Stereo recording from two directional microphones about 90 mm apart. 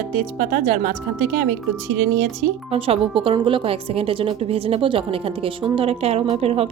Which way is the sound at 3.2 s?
70° right (ahead or behind).